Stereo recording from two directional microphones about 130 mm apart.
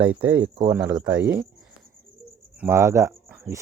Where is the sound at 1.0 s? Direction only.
5° right (ahead or behind).